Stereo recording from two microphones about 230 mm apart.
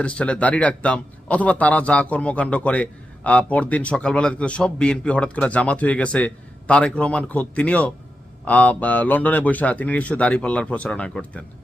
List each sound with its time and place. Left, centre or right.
0.0 s a man's voice: centre